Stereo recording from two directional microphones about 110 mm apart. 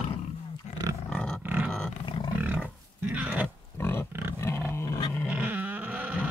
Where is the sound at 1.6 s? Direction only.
10° left (ahead or behind).